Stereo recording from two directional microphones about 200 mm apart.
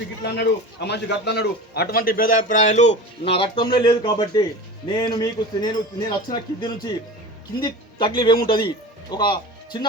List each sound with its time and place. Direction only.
0.2 s a man's voice: 60° left (ahead or behind); by 9.8 s 20° left (ahead or behind)